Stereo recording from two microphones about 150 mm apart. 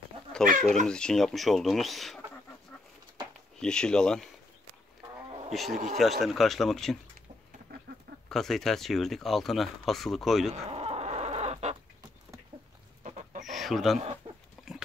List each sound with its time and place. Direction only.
0.5 s speech: 55° right (ahead or behind)
0.8 s speech: 5° left (ahead or behind)
3.5 s speech: 5° left (ahead or behind)
5.5 s speech: centre (ahead or behind)
7.7 s chicken: 90° right
8.3 s speech: centre (ahead or behind)
10.5 s livestock: 45° right (ahead or behind)
13.0 s chicken: 50° right (ahead or behind)
13.5 s a sound: centre (ahead or behind)
14.2 s a sound: 35° right (ahead or behind)